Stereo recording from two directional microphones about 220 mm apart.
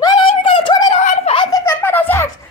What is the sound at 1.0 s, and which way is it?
Music, 30° left (ahead or behind).